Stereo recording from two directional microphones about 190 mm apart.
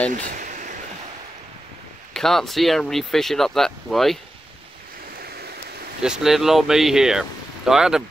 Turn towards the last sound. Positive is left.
turn(degrees=-5)  # may be behind; listen again after turning